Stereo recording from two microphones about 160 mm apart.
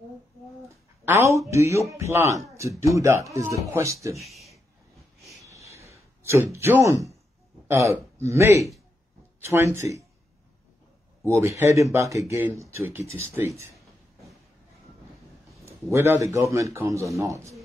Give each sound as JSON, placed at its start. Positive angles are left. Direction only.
{"t": 0.7, "sound": "a man's voice", "side_deg": -15}
{"t": 4.2, "sound": "a sound", "side_deg": 0}
{"t": 5.3, "sound": "a sound", "side_deg": -20}
{"t": 6.2, "sound": "a man's voice", "side_deg": -15}
{"t": 11.4, "sound": "speech", "side_deg": -20}
{"t": 15.6, "sound": "a man's voice", "side_deg": -15}